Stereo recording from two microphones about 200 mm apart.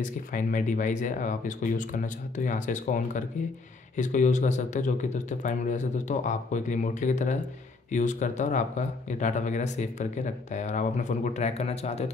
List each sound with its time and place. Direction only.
0.0 s speech: 40° left (ahead or behind)